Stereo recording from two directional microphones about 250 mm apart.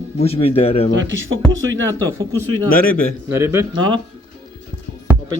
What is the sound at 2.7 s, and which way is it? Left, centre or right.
Speech, left.